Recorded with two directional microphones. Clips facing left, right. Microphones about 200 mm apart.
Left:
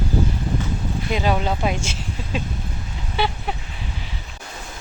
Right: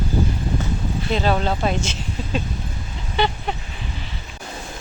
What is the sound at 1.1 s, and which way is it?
Speech, 10° left (ahead or behind).